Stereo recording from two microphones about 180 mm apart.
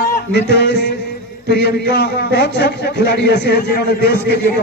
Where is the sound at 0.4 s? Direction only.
70° left (ahead or behind).